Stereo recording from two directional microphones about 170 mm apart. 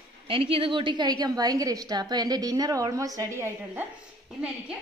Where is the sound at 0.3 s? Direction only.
30° right (ahead or behind); by 3.8 s 15° right (ahead or behind).